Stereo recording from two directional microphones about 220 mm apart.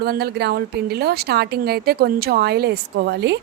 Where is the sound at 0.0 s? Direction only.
45° right (ahead or behind).